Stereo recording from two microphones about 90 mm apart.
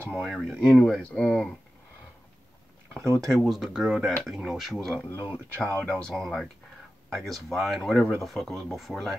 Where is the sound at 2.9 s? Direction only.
30° right (ahead or behind).